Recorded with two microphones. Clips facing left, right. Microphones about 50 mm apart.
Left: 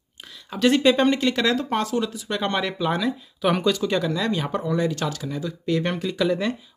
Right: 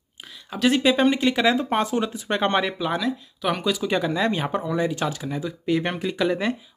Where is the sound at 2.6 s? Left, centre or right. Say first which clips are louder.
Even; centre.